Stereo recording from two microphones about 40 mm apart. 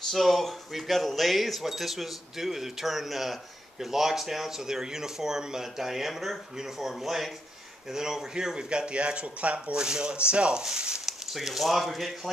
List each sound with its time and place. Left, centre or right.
0.1 s speech: centre
8.5 s speech: right
9.7 s speech: centre
10.6 s speech: centre
11.1 s speech: centre